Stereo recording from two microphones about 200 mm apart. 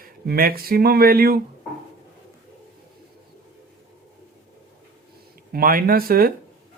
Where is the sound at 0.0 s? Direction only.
45° right (ahead or behind).